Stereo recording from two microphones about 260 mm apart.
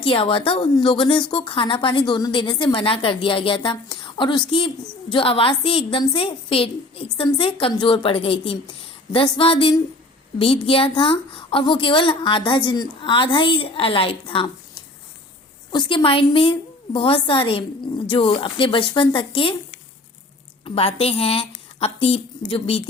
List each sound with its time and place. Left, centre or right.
0.0 s a woman's voice: centre